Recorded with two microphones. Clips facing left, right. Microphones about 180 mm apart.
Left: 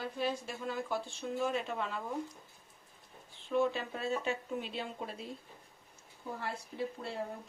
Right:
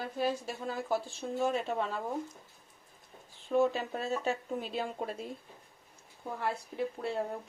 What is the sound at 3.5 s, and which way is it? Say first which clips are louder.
Speech: right 3 dB; 40° right (ahead or behind).